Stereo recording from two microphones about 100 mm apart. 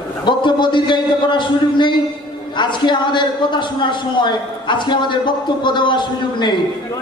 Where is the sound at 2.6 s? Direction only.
50° left (ahead or behind).